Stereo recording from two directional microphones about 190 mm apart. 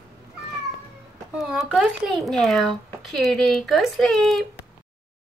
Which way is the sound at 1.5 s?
Centre (ahead or behind).